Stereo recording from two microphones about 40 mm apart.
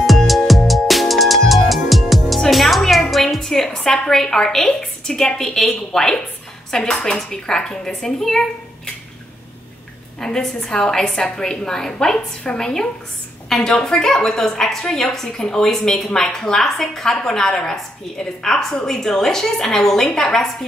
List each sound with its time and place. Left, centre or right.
0.3 s music: centre
3.9 s a woman's voice: centre
10.2 s a woman's voice: centre